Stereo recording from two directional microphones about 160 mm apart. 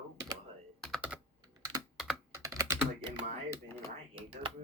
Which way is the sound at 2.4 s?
20° right (ahead or behind).